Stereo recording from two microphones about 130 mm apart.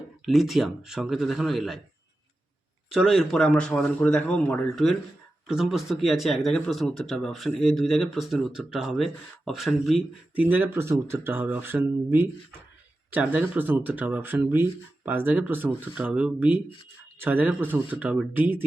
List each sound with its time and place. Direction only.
0.3 s speech: centre (ahead or behind)
2.9 s speech: centre (ahead or behind)
10.3 s speech: 10° right (ahead or behind)